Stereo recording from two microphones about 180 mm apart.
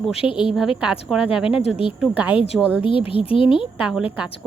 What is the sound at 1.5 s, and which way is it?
Speech, 30° left (ahead or behind).